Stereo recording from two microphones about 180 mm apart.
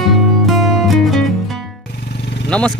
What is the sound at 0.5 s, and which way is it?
Music, centre (ahead or behind).